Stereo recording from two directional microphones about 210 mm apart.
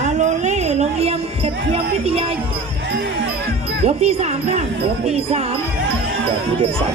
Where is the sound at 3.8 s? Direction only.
30° right (ahead or behind).